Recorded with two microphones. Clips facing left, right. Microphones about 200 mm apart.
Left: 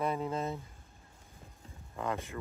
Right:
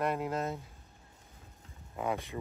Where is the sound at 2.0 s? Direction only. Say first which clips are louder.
Right 2 dB; 15° right (ahead or behind).